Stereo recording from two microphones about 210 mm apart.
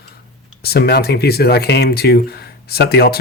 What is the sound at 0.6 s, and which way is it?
Speech, 50° left (ahead or behind).